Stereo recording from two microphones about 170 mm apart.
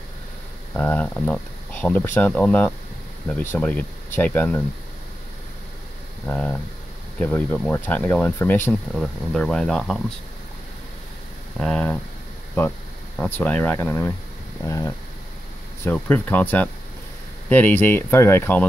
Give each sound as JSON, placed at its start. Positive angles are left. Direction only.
{"t": 0.7, "sound": "speech", "side_deg": 10}
{"t": 6.2, "sound": "speech", "side_deg": 10}
{"t": 11.5, "sound": "speech", "side_deg": 5}
{"t": 13.2, "sound": "speech", "side_deg": 10}